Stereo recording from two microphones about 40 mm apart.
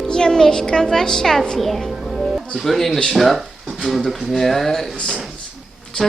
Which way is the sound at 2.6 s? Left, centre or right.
Centre.